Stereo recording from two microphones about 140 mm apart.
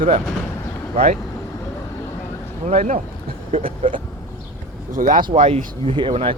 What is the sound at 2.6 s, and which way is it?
Speech, 55° right (ahead or behind).